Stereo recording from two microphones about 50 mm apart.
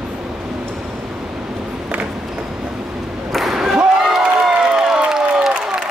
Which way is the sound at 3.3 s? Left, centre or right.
Centre.